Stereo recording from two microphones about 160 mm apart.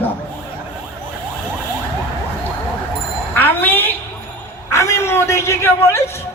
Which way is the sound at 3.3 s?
10° left (ahead or behind).